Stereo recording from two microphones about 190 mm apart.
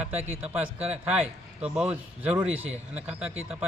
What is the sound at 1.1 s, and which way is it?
A man's voice, 5° right (ahead or behind).